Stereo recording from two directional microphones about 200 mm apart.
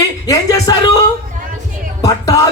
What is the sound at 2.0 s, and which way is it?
Speech, 15° left (ahead or behind).